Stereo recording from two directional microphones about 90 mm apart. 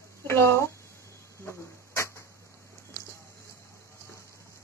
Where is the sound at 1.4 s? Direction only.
30° left (ahead or behind).